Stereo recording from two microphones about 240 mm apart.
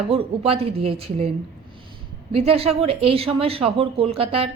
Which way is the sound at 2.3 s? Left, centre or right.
Right.